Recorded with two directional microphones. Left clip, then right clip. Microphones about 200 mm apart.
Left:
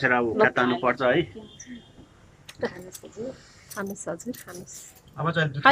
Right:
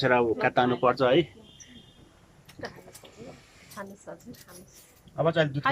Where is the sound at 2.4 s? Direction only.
50° left (ahead or behind).